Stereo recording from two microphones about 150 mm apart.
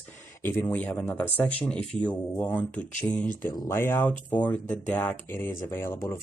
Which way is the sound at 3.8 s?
15° left (ahead or behind).